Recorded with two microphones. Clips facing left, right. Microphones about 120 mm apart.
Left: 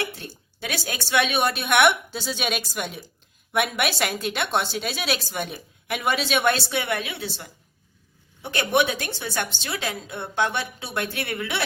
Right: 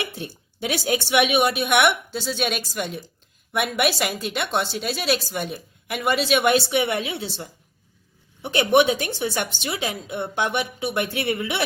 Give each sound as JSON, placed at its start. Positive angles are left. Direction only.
{"t": 0.0, "sound": "a woman's voice", "side_deg": -20}
{"t": 6.7, "sound": "a woman's voice", "side_deg": -20}